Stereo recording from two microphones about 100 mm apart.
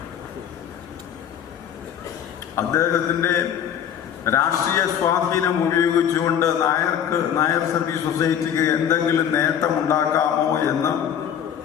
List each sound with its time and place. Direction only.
2.6 s a man's voice: 30° left (ahead or behind)